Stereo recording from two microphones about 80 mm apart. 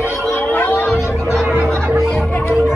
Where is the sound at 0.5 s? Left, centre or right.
Left.